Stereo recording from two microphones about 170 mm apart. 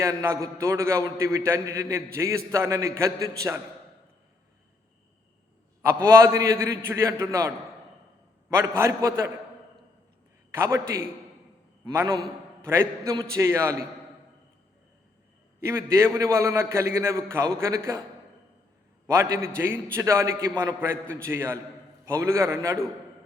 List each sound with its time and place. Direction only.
0.0 s a man's voice: 15° right (ahead or behind)
6.1 s a man's voice: 15° right (ahead or behind)
8.5 s a man's voice: 15° right (ahead or behind)
10.5 s a man's voice: 15° right (ahead or behind)
15.6 s a man's voice: 15° right (ahead or behind)
19.0 s a man's voice: 15° right (ahead or behind)